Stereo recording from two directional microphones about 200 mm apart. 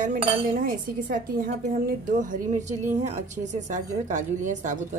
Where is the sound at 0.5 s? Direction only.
45° right (ahead or behind).